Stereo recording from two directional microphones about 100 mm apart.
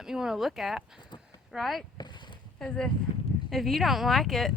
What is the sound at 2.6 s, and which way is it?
Speech, 10° left (ahead or behind).